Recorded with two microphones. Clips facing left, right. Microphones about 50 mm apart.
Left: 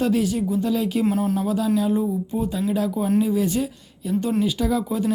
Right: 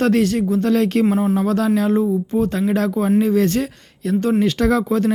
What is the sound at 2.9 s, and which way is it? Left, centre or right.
Speech, right.